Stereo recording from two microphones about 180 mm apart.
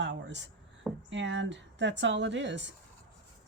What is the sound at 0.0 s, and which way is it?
Speech, 80° right.